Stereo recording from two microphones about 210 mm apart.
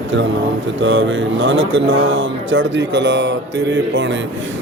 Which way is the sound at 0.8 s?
60° right (ahead or behind).